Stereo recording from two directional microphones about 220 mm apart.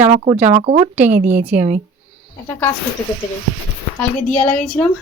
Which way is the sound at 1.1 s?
35° right (ahead or behind).